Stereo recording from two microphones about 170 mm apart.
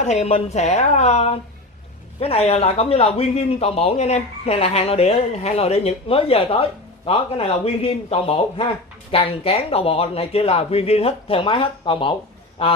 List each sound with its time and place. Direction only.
0.0 s speech: 40° left (ahead or behind)